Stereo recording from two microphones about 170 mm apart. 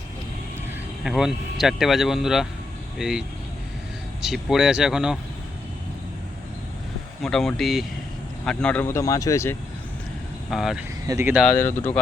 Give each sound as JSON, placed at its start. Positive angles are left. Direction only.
{"t": 1.0, "sound": "speech", "side_deg": 0}
{"t": 7.2, "sound": "speech", "side_deg": 5}
{"t": 10.5, "sound": "speech", "side_deg": 0}
{"t": 11.0, "sound": "speech", "side_deg": -15}
{"t": 11.5, "sound": "speech", "side_deg": 10}